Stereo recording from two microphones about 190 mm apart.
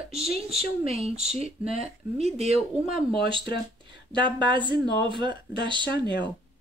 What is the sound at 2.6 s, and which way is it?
Speech, centre (ahead or behind).